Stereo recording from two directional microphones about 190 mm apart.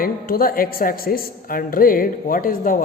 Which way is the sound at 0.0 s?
50° left (ahead or behind).